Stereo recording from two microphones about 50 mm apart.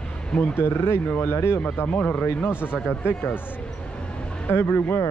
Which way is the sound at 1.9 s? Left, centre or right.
Left.